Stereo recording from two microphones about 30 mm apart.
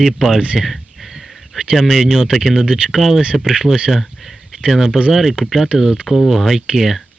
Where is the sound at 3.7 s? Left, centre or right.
Left.